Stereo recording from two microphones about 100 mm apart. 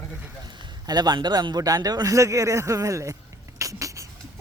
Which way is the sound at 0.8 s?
45° right (ahead or behind).